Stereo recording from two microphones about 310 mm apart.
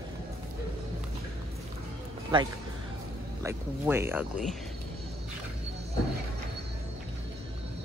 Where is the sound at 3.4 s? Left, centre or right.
Centre.